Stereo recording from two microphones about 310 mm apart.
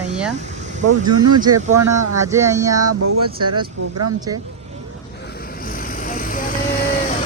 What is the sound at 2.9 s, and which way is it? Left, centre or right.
Speech, right.